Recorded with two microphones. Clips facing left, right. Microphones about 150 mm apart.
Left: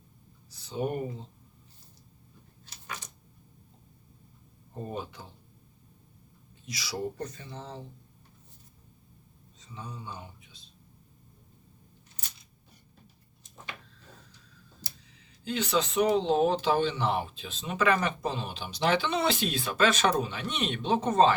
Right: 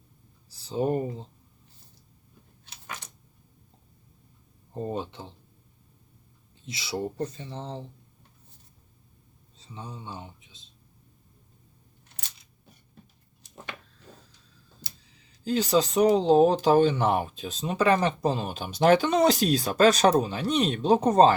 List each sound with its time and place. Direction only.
0.5 s speech: 30° right (ahead or behind)
4.7 s speech: 30° right (ahead or behind)
6.7 s speech: 25° right (ahead or behind)
9.6 s speech: 30° right (ahead or behind)
15.4 s speech: 35° right (ahead or behind)